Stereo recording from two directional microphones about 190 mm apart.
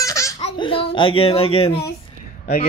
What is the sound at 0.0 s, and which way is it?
Laughter, 15° left (ahead or behind).